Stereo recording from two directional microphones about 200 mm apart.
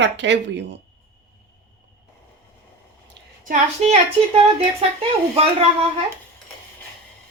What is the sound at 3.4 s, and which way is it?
A woman's voice, 35° right (ahead or behind).